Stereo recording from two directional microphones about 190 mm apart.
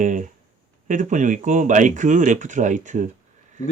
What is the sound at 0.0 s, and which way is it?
Speech, 40° right (ahead or behind).